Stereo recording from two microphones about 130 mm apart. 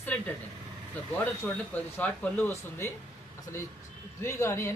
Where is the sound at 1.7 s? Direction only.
10° left (ahead or behind).